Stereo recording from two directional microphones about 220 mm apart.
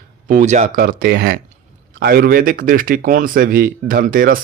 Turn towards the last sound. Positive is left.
turn(degrees=-40)  # may be behind; listen again after turning